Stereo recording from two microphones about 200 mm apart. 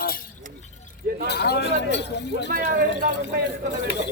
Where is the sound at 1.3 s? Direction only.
55° left (ahead or behind).